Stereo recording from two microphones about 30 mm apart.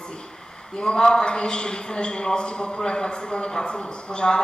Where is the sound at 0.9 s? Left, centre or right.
Left.